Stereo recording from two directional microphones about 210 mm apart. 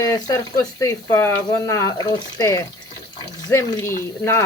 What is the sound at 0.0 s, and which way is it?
Speech, 15° left (ahead or behind).